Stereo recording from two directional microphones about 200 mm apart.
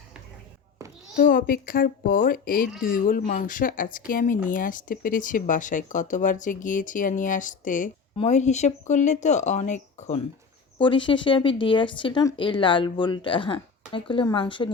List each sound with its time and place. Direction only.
1.1 s a child's voice: 45° left (ahead or behind)
10.8 s speech: 25° left (ahead or behind)